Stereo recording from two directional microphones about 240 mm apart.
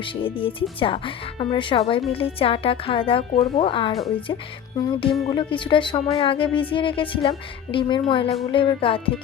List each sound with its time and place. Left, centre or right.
0.0 s speech: left